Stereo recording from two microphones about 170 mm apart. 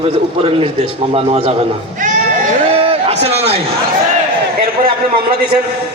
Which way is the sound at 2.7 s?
35° right (ahead or behind).